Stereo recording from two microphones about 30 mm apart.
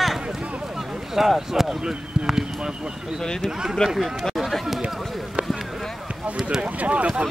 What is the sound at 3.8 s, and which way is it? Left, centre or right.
Speech, left.